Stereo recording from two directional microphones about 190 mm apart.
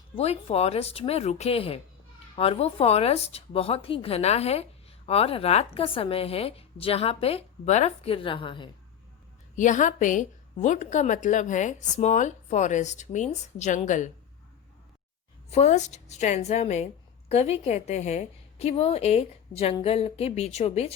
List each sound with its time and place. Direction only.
0.2 s speech: 35° left (ahead or behind)
9.6 s speech: 40° left (ahead or behind)
15.4 s speech: 35° left (ahead or behind)